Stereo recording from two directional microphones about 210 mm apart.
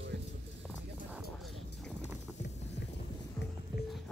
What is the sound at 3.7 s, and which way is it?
Music, 20° right (ahead or behind).